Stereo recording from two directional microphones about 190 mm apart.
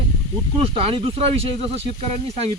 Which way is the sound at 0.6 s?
30° right (ahead or behind).